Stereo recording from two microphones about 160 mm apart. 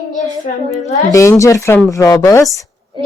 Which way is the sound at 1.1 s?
20° left (ahead or behind).